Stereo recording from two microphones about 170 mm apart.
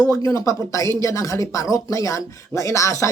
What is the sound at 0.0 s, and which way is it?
Speech, 20° left (ahead or behind).